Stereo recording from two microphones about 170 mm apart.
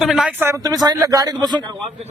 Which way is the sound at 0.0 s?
5° right (ahead or behind).